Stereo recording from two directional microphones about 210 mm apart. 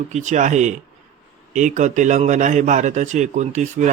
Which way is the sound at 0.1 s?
35° right (ahead or behind).